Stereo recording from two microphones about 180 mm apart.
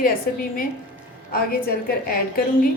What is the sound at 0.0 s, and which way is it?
A woman's voice, 50° left (ahead or behind).